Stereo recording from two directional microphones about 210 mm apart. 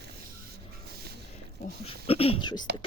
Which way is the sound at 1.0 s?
50° right (ahead or behind).